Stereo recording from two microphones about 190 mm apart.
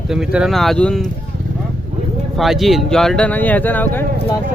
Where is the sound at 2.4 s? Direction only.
Centre (ahead or behind).